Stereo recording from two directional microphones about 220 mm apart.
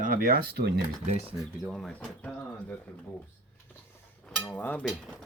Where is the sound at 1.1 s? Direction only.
30° right (ahead or behind).